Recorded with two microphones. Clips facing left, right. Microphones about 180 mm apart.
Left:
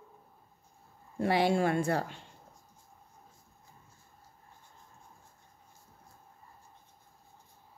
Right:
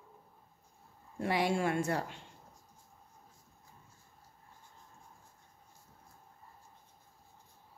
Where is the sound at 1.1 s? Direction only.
30° left (ahead or behind).